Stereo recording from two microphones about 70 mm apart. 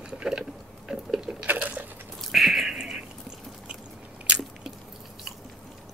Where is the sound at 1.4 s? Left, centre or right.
Right.